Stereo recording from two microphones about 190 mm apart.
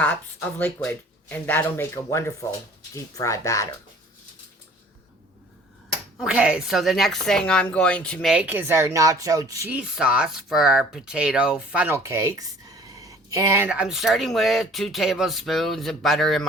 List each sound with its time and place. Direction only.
0.0 s speech: 10° left (ahead or behind)
6.1 s a woman's voice: 5° right (ahead or behind)